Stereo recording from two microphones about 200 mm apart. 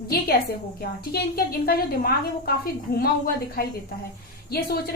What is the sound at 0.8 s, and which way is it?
A woman's voice, 50° left (ahead or behind).